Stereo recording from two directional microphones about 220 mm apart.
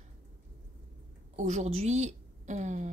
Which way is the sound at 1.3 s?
30° right (ahead or behind).